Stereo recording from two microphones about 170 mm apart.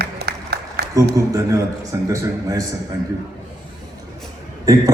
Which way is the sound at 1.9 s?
20° right (ahead or behind).